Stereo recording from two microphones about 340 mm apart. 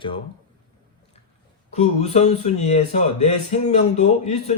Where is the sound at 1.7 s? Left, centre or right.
Centre.